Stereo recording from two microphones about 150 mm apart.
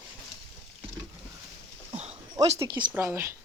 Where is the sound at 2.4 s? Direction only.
20° right (ahead or behind).